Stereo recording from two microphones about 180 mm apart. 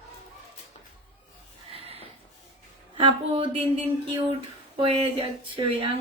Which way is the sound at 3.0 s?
30° right (ahead or behind).